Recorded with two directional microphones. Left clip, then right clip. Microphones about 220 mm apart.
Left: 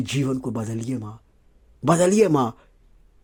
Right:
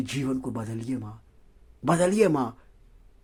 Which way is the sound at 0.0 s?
25° left (ahead or behind).